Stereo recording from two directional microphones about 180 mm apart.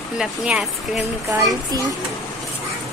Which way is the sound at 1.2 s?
20° right (ahead or behind).